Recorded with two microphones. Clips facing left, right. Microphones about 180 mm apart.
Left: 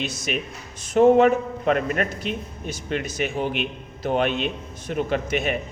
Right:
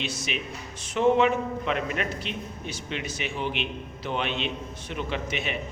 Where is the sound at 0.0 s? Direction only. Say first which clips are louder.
Left 4 dB; 45° left (ahead or behind).